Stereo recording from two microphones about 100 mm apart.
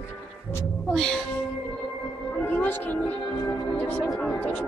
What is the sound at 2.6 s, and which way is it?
Speech, 20° left (ahead or behind).